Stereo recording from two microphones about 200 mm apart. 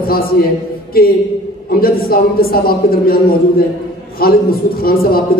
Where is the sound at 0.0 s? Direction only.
45° left (ahead or behind).